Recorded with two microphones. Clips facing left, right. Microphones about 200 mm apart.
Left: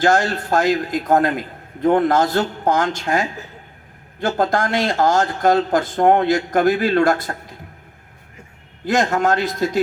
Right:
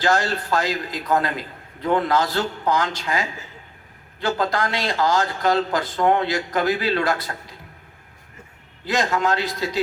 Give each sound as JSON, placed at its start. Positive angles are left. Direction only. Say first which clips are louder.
{"t": 0.0, "sound": "speech", "louder": "left 4 dB", "side_deg": 50}
{"t": 8.8, "sound": "speech", "louder": "left 4 dB", "side_deg": 50}